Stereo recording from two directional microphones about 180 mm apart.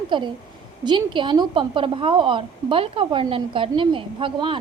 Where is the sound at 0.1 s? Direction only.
25° right (ahead or behind).